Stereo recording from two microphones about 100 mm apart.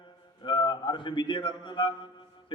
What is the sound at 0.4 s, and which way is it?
A man's voice, 50° left (ahead or behind).